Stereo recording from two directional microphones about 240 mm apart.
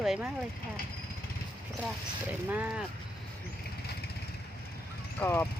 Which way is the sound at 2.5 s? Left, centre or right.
Centre.